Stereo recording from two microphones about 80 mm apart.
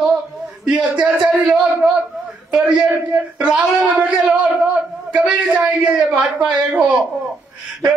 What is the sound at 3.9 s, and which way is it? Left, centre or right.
A man's voice, centre.